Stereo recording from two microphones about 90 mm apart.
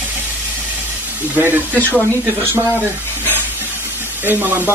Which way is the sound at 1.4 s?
25° right (ahead or behind).